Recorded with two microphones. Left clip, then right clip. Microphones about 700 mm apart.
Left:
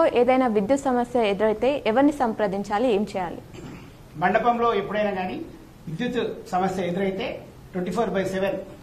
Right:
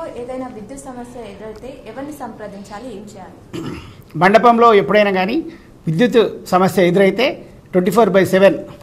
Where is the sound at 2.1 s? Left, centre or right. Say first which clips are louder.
Left 6 dB; left.